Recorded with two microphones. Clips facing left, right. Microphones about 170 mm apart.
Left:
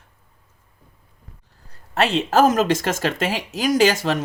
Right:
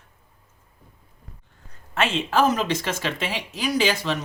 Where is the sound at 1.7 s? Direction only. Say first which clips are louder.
Left 4 dB; 35° left (ahead or behind).